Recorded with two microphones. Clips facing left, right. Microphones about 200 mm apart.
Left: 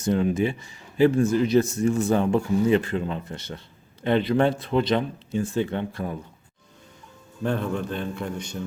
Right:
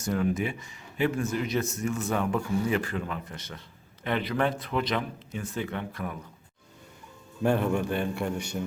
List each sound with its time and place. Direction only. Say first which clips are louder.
0.0 s speech: left 5 dB; 25° left (ahead or behind)
7.4 s a man's voice: right 1 dB; 10° right (ahead or behind)